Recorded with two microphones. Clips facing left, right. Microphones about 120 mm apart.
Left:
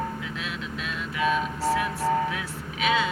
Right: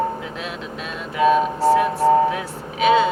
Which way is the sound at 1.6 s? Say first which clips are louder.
Right 9 dB; 30° right (ahead or behind).